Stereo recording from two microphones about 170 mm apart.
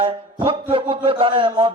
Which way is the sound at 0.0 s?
30° right (ahead or behind).